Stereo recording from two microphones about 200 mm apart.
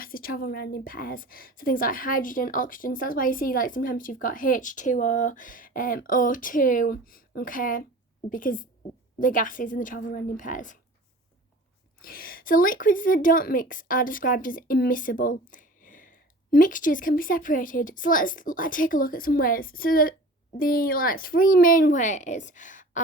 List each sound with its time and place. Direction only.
0.0 s a woman's voice: 45° left (ahead or behind)
12.0 s a woman's voice: 45° left (ahead or behind)